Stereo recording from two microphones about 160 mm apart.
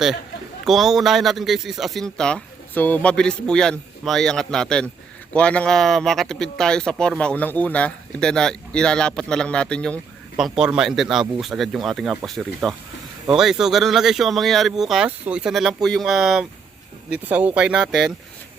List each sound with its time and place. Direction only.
0.6 s speech: centre (ahead or behind)